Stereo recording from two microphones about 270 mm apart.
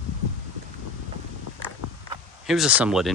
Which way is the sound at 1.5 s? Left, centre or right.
Left.